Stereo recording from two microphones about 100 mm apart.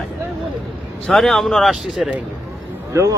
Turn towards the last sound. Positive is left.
turn(degrees=-30)  # may be behind; listen again after turning